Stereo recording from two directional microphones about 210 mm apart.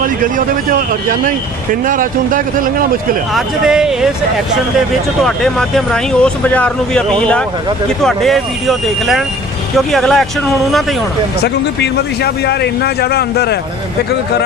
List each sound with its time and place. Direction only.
0.0 s speech: 40° right (ahead or behind)
3.3 s speech: centre (ahead or behind)
5.2 s speech: centre (ahead or behind)
11.4 s a man's voice: 50° left (ahead or behind)